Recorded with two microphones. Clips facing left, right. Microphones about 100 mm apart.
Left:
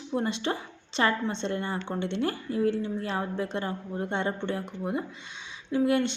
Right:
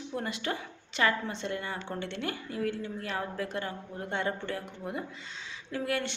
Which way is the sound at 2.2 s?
30° left (ahead or behind).